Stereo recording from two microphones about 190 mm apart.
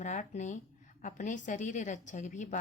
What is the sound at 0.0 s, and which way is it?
A woman's voice, 40° left (ahead or behind).